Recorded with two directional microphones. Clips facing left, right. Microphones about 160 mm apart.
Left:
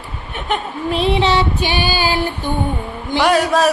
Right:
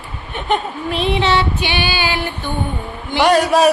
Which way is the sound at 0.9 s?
35° left (ahead or behind).